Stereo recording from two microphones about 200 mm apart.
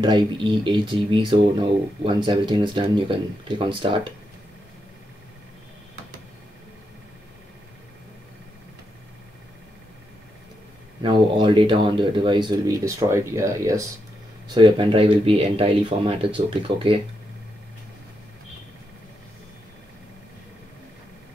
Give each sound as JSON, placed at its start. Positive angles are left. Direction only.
{"t": 0.0, "sound": "speech", "side_deg": -25}
{"t": 11.0, "sound": "speech", "side_deg": -25}